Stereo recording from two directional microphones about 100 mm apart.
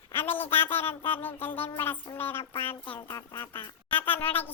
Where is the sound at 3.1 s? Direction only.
40° left (ahead or behind).